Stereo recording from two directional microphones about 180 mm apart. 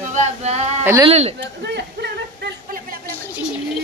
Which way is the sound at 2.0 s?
60° right (ahead or behind).